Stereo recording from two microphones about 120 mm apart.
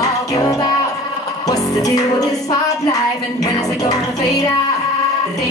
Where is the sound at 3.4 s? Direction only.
30° left (ahead or behind).